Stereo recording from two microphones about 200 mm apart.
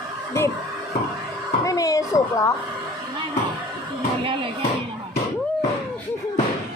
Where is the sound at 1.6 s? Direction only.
15° left (ahead or behind).